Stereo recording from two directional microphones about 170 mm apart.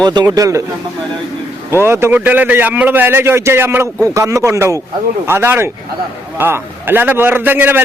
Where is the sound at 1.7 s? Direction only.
15° right (ahead or behind).